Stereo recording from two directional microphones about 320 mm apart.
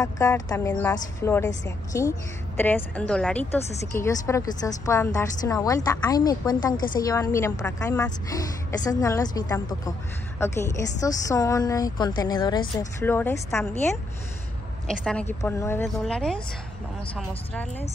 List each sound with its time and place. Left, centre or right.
0.0 s a woman's voice: centre
14.9 s speech: centre